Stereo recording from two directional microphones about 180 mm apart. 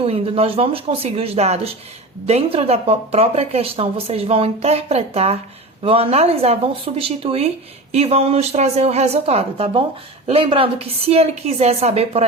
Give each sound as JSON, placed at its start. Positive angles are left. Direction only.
{"t": 0.0, "sound": "a woman's voice", "side_deg": -30}